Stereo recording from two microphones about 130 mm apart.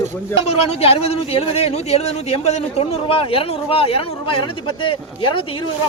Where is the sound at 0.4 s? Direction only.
55° left (ahead or behind).